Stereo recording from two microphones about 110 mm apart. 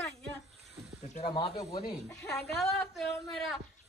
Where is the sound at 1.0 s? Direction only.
90° left.